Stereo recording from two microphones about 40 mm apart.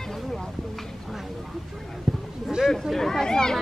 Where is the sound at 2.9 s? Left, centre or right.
Centre.